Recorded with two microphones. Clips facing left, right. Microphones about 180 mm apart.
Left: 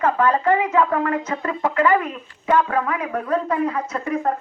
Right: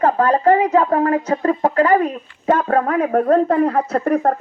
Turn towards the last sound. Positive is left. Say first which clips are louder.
# right 6 dB
turn(degrees=-60)  # may be behind; listen again after turning